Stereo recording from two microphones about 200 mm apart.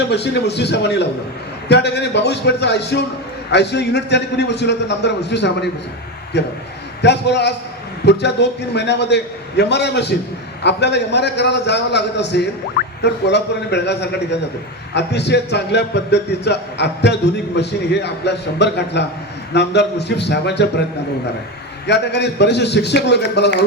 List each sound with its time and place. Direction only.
0.1 s a man's voice: 60° left (ahead or behind)
21.8 s a man's voice: 60° left (ahead or behind)